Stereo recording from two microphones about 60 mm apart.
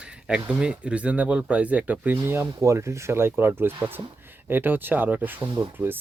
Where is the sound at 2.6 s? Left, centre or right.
Right.